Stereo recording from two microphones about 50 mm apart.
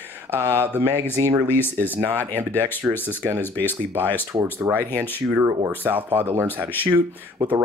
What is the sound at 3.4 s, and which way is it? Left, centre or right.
Speech, left.